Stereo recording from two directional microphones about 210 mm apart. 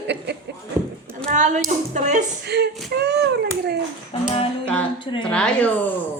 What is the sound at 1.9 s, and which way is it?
Speech, 35° right (ahead or behind).